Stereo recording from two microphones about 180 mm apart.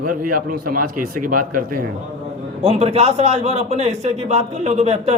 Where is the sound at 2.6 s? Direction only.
35° right (ahead or behind).